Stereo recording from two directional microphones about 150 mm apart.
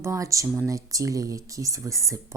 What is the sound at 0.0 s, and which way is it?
Speech, 20° right (ahead or behind).